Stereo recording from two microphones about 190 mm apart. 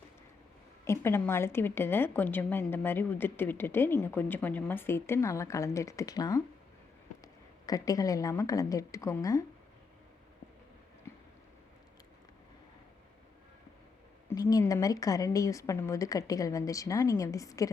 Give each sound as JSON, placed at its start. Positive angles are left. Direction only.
{"t": 0.9, "sound": "a woman's voice", "side_deg": 10}
{"t": 7.7, "sound": "a woman's voice", "side_deg": 20}
{"t": 14.3, "sound": "a woman's voice", "side_deg": 15}